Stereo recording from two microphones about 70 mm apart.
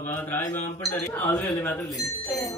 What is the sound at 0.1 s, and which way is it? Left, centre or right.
A man's voice, left.